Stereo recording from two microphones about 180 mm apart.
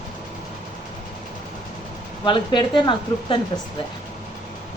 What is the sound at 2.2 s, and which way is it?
Speech, 25° left (ahead or behind).